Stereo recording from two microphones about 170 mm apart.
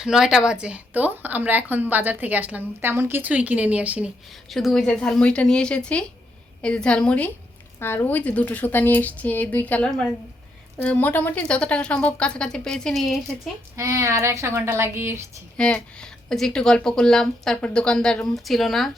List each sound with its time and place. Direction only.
0.0 s a woman's voice: 5° right (ahead or behind)
13.7 s a woman's voice: 15° right (ahead or behind)
15.5 s speech: 5° left (ahead or behind)